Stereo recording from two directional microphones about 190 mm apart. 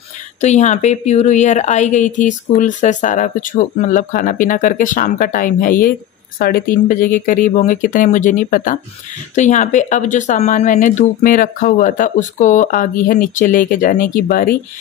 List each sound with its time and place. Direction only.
0.4 s a woman's voice: 40° left (ahead or behind)